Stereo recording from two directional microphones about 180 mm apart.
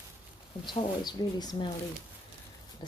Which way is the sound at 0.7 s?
25° left (ahead or behind).